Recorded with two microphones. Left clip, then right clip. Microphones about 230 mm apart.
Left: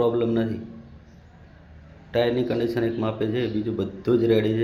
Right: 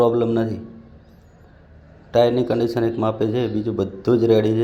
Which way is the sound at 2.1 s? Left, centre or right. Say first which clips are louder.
Right 6 dB; centre.